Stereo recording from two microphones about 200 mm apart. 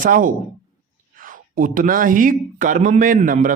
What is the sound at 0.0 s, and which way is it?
Speech, 40° right (ahead or behind).